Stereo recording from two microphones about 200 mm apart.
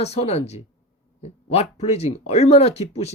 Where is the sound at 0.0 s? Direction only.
30° left (ahead or behind).